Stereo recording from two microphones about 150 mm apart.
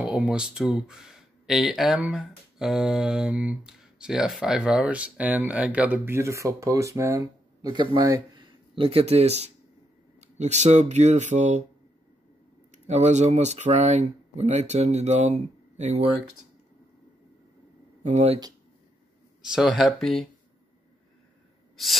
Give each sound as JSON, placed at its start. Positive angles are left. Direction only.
{"t": 0.0, "sound": "speech", "side_deg": -5}
{"t": 8.7, "sound": "speech", "side_deg": -40}
{"t": 12.7, "sound": "speech", "side_deg": -50}
{"t": 18.0, "sound": "speech", "side_deg": -45}
{"t": 19.4, "sound": "speech", "side_deg": -5}
{"t": 21.8, "sound": "speech", "side_deg": 0}